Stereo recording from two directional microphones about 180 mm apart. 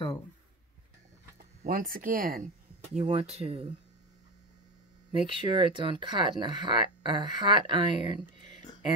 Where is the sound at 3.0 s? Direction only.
35° right (ahead or behind).